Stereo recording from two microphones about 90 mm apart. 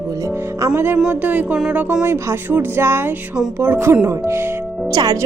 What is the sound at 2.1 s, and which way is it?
A woman's voice, 25° right (ahead or behind).